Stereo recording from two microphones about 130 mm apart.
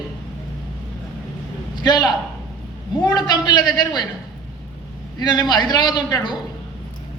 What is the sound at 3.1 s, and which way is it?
Speech, 30° left (ahead or behind).